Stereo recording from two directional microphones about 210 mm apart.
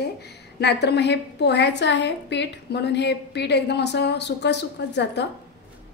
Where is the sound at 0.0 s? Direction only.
50° left (ahead or behind).